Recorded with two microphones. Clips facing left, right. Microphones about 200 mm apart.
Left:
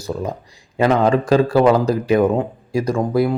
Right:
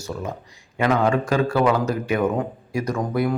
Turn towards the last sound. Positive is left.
turn(degrees=30)  # may be behind; listen again after turning